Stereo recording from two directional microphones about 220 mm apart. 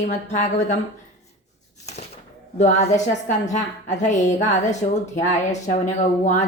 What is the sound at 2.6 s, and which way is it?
A woman's voice, 30° left (ahead or behind).